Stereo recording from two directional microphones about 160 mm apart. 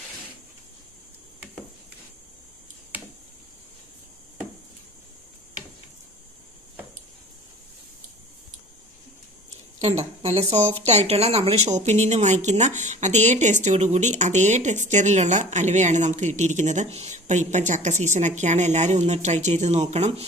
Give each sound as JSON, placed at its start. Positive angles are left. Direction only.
{"t": 9.8, "sound": "speech", "side_deg": -45}